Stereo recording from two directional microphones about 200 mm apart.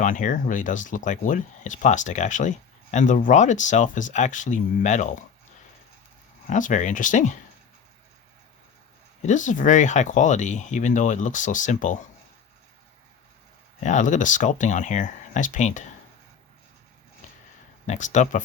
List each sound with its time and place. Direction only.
0.0 s speech: 40° left (ahead or behind)
6.5 s speech: 40° left (ahead or behind)
9.2 s speech: 40° left (ahead or behind)
13.8 s speech: 40° left (ahead or behind)
17.8 s speech: 35° left (ahead or behind)